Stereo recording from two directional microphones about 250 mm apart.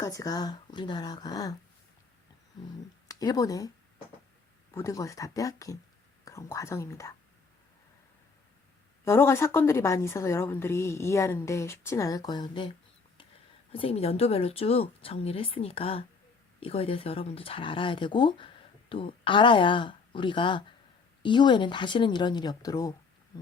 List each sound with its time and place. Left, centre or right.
0.0 s a woman's voice: centre
3.1 s speech: centre
4.7 s a woman's voice: centre
9.0 s a woman's voice: centre
13.7 s a woman's voice: left